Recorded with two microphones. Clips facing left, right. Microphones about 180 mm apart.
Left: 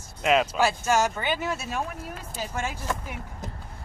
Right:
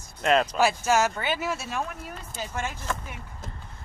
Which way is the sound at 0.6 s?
5° right (ahead or behind).